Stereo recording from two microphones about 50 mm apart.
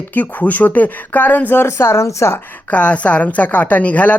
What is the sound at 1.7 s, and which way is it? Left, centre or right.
Speech, left.